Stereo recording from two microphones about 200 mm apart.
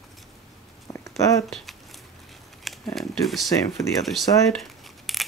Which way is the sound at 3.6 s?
15° left (ahead or behind).